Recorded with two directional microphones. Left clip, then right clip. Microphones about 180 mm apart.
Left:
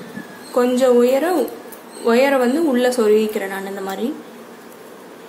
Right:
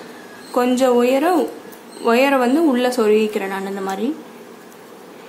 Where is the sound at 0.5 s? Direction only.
25° right (ahead or behind).